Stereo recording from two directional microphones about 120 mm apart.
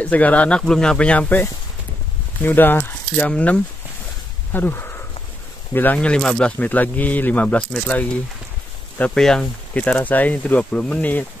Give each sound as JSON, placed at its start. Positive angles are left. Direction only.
{"t": 0.0, "sound": "speech", "side_deg": 10}
{"t": 4.5, "sound": "a sound", "side_deg": 15}
{"t": 5.7, "sound": "speech", "side_deg": 15}